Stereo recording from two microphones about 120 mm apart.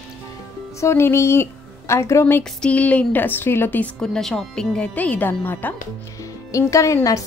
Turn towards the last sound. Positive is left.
turn(degrees=25)  # may be behind; listen again after turning